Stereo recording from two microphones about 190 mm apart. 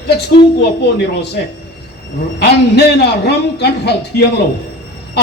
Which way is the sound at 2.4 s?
60° left (ahead or behind).